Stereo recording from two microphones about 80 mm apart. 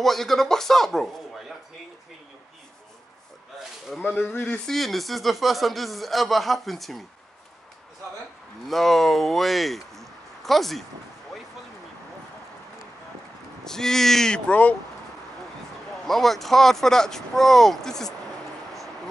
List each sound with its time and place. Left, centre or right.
0.0 s speech: centre
4.3 s speech: left
4.6 s speech: centre
8.6 s speech: centre
13.7 s speech: centre
14.5 s speech: centre
16.1 s speech: centre